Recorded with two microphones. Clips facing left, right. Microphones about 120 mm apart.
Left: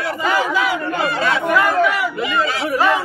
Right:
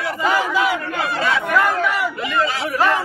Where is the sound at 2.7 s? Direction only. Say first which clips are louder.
Left 2 dB; 15° left (ahead or behind).